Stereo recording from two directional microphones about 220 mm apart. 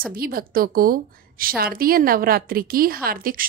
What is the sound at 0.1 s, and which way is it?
A woman's voice, 40° right (ahead or behind).